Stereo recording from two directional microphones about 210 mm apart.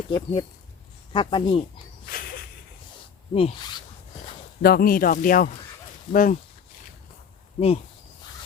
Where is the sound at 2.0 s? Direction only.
45° left (ahead or behind).